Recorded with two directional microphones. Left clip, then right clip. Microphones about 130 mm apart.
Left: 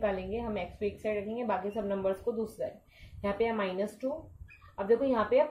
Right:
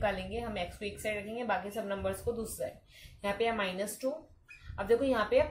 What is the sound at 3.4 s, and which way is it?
Speech, 30° left (ahead or behind).